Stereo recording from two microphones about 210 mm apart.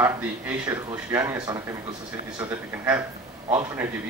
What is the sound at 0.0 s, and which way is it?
Speech, 10° right (ahead or behind).